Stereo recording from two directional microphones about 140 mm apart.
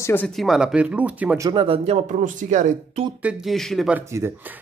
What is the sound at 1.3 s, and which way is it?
Speech, 30° right (ahead or behind).